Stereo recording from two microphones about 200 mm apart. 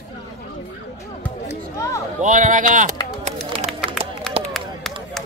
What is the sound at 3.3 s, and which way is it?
Run, 30° right (ahead or behind).